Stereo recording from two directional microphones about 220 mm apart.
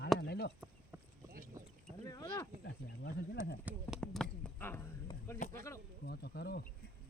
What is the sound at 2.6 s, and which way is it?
Snake, 50° left (ahead or behind).